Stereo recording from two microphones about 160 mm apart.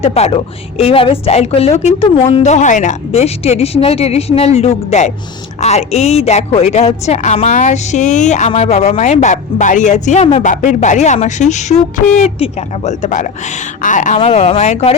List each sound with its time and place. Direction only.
0.0 s a woman's voice: 40° left (ahead or behind)
14.2 s a woman's voice: 40° left (ahead or behind)